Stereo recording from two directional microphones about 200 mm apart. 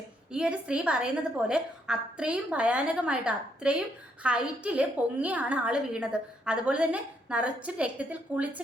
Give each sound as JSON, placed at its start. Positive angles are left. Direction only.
{"t": 0.3, "sound": "a woman's voice", "side_deg": -5}